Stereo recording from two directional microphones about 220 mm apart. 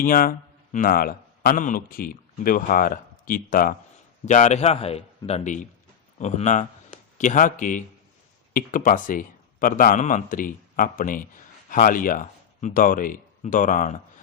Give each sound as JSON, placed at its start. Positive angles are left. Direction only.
{"t": 0.0, "sound": "a man's voice", "side_deg": 40}